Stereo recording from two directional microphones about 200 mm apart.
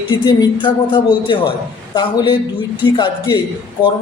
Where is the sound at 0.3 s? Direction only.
20° left (ahead or behind).